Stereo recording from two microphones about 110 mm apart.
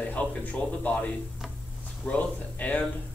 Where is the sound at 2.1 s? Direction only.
15° left (ahead or behind).